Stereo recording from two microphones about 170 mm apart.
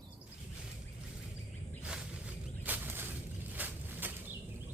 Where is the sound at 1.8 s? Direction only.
5° right (ahead or behind).